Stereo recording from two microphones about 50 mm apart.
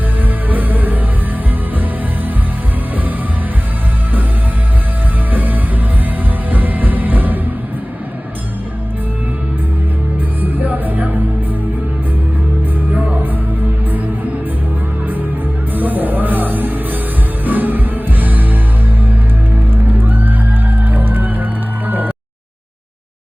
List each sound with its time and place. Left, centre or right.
0.4 s music: right
5.3 s music: right
10.4 s music: right
12.9 s music: right
15.7 s music: right
19.7 s music: right